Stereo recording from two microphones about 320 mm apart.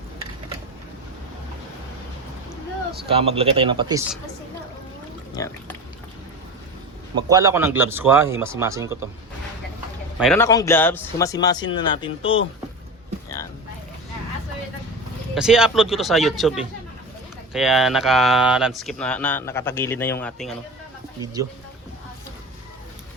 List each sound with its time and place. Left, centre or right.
3.1 s speech: centre
5.4 s speech: centre
7.2 s speech: centre
10.2 s speech: centre
13.2 s a sound: centre
15.4 s speech: centre
21.4 s speech: centre